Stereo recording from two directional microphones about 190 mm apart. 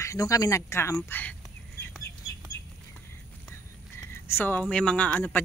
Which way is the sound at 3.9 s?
15° left (ahead or behind).